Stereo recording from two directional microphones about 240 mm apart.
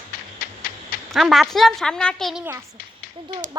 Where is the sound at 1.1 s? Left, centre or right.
Centre.